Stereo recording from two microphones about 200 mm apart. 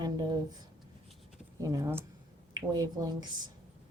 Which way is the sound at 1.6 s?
15° right (ahead or behind).